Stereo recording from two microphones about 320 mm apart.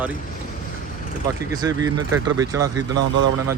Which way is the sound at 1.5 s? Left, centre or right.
Centre.